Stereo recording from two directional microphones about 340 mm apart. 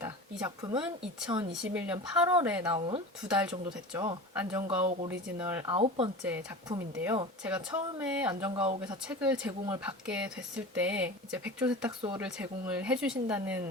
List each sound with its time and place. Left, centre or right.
0.0 s speech: centre
4.8 s speech: centre
5.4 s speech: centre
5.7 s speech: centre
6.2 s speech: centre
8.8 s speech: centre